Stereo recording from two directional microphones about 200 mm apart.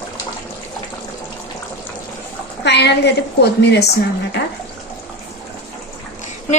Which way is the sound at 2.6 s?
60° left (ahead or behind).